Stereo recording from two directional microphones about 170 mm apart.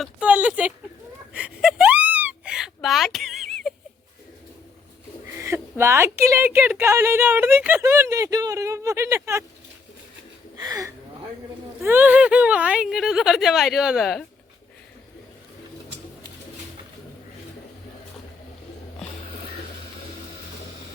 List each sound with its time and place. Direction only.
0.0 s a woman's voice: 5° right (ahead or behind)
1.3 s whimper: 5° right (ahead or behind)
5.2 s a woman's voice: 15° right (ahead or behind)
10.6 s speech: 20° right (ahead or behind); by 14.3 s centre (ahead or behind)